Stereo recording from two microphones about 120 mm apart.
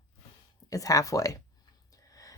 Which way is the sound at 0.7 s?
30° left (ahead or behind).